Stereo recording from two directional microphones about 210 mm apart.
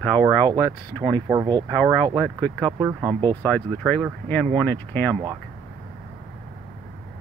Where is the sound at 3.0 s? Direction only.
20° right (ahead or behind).